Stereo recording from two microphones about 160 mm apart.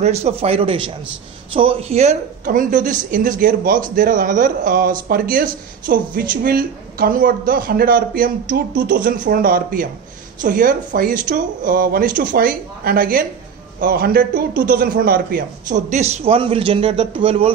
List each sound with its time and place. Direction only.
0.0 s a woman's voice: 40° right (ahead or behind)